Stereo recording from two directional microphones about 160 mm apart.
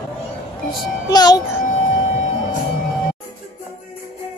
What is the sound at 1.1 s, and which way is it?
Child singing, 25° left (ahead or behind).